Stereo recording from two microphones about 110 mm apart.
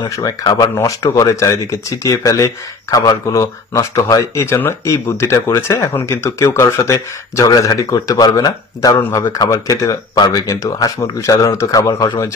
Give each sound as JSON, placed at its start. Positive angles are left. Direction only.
{"t": 0.0, "sound": "speech", "side_deg": 35}
{"t": 4.4, "sound": "speech", "side_deg": 20}